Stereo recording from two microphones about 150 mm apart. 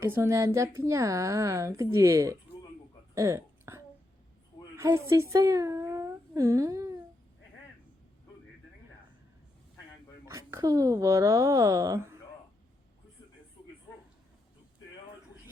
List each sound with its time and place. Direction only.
0.0 s speech: 15° right (ahead or behind)
3.2 s a sound: 20° right (ahead or behind)
4.8 s speech: 20° right (ahead or behind)
10.2 s speech: 20° right (ahead or behind)